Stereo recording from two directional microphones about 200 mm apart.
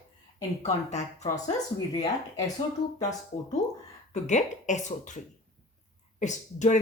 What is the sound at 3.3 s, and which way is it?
Speech, 45° left (ahead or behind).